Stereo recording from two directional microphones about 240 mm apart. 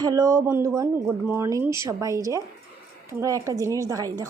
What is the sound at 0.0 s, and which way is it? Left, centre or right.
A woman's voice, centre.